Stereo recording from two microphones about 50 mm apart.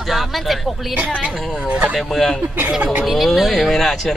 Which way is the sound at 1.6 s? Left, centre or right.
Right.